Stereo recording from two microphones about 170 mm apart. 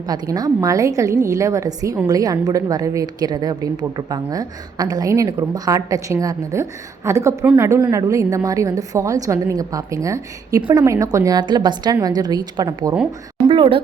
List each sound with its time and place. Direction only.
0.1 s a woman's voice: 25° right (ahead or behind)
10.6 s a woman's voice: 30° right (ahead or behind)
10.8 s a woman's voice: 20° right (ahead or behind)